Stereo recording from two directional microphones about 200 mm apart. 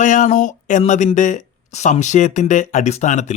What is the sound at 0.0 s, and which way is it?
Speech, 40° left (ahead or behind).